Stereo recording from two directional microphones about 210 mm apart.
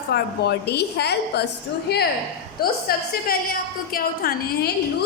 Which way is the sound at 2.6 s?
45° left (ahead or behind).